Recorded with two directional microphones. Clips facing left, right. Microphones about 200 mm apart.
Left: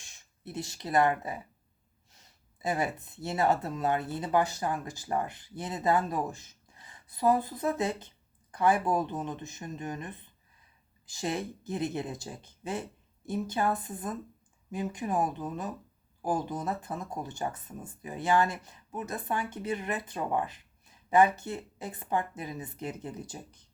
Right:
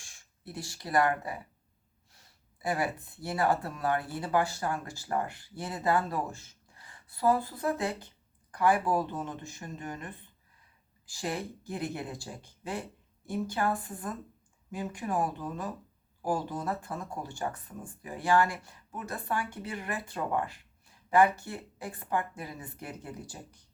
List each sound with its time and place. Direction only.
0.0 s speech: 20° left (ahead or behind)